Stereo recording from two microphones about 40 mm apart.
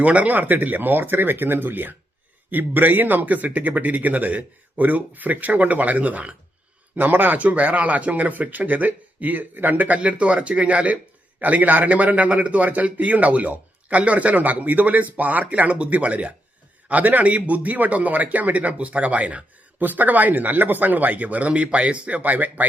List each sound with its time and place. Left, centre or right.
0.0 s a man's voice: right
19.8 s a man's voice: right